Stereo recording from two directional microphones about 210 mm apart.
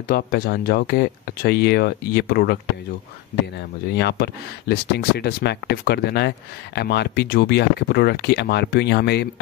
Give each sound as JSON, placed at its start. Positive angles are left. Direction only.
{"t": 0.1, "sound": "speech", "side_deg": 50}
{"t": 3.9, "sound": "speech", "side_deg": 50}